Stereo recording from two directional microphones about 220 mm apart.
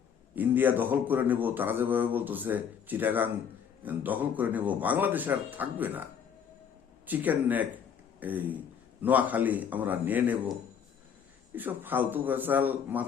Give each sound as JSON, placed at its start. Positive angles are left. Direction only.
{"t": 0.3, "sound": "speech", "side_deg": -10}
{"t": 7.1, "sound": "speech", "side_deg": -5}
{"t": 11.5, "sound": "speech", "side_deg": -10}